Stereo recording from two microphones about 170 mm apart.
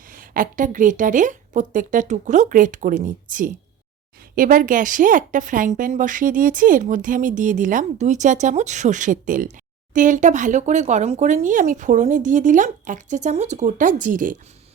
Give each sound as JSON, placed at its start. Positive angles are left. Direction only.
{"t": 0.1, "sound": "speech", "side_deg": -55}